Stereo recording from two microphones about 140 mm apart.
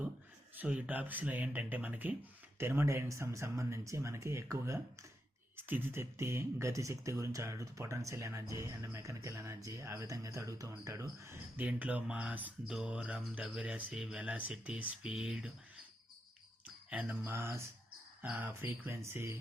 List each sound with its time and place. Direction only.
0.5 s speech: 10° right (ahead or behind)
16.9 s speech: 10° right (ahead or behind)